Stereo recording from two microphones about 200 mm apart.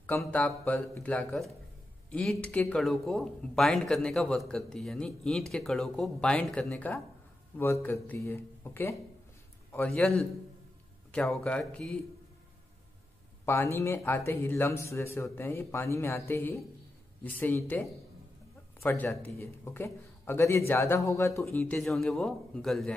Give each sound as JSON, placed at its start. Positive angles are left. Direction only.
{"t": 0.0, "sound": "a man's voice", "side_deg": 10}
{"t": 13.5, "sound": "speech", "side_deg": 10}